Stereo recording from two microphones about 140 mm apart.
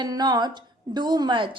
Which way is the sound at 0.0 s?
30° right (ahead or behind).